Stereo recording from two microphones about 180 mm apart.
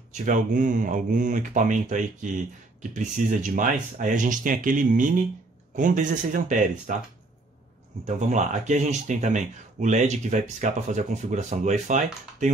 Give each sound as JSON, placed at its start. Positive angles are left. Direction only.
{"t": 0.1, "sound": "speech", "side_deg": -45}
{"t": 8.3, "sound": "speech", "side_deg": -40}